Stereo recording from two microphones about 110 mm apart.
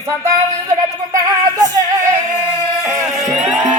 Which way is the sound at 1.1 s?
35° right (ahead or behind).